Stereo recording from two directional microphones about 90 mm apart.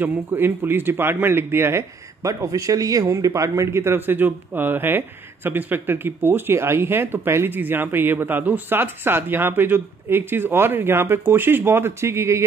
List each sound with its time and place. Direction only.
0.0 s speech: 20° right (ahead or behind)